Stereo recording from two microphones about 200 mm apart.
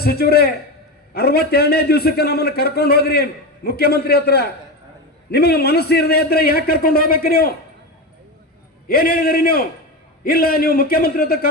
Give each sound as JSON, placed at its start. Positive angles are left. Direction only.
{"t": 0.0, "sound": "a man's voice", "side_deg": 50}
{"t": 8.9, "sound": "a man's voice", "side_deg": 50}